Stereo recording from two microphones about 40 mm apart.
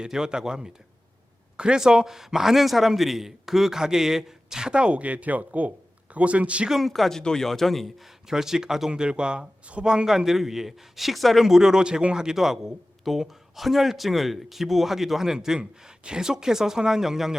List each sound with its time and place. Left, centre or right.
0.0 s a man's voice: centre
4.7 s speech: right
6.7 s a man's voice: centre
6.9 s speech: centre
7.2 s speech: centre
8.3 s a man's voice: centre
8.9 s a man's voice: right; by 11.4 s centre
11.4 s a man's voice: centre